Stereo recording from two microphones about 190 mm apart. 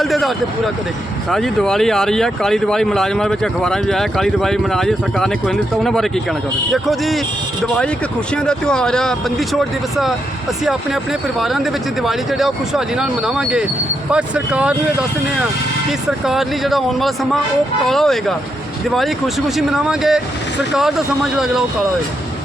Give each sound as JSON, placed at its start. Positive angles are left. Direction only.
{"t": 0.0, "sound": "speech", "side_deg": 0}
{"t": 8.4, "sound": "speech", "side_deg": 5}
{"t": 15.9, "sound": "speech", "side_deg": 0}
{"t": 19.5, "sound": "speech", "side_deg": 0}
{"t": 21.3, "sound": "speech", "side_deg": -5}